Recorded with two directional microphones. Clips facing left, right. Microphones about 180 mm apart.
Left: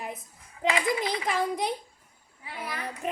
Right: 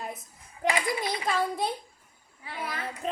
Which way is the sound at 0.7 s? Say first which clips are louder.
Left 2 dB; 20° left (ahead or behind).